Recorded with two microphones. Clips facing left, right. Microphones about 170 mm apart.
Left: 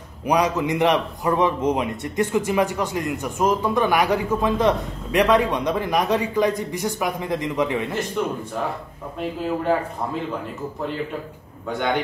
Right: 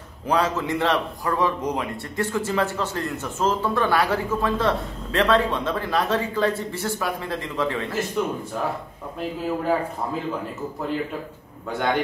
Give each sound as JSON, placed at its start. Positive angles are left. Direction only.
{"t": 0.3, "sound": "a man's voice", "side_deg": 15}